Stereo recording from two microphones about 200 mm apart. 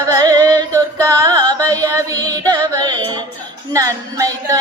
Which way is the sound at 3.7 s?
15° right (ahead or behind).